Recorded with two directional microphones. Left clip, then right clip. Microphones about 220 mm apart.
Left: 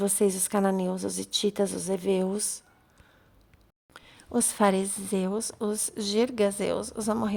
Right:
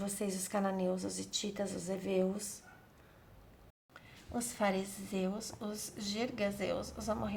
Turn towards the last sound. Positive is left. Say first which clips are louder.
# left 9 dB
turn(degrees=50)  # may be behind; listen again after turning